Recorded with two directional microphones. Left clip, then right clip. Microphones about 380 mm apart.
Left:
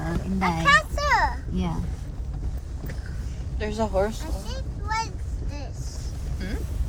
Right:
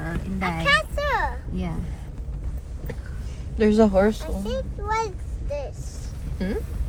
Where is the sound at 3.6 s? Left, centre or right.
Centre.